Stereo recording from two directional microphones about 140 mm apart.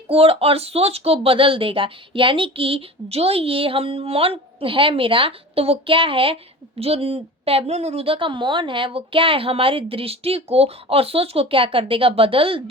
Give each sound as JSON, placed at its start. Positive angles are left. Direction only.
{"t": 0.1, "sound": "speech", "side_deg": -45}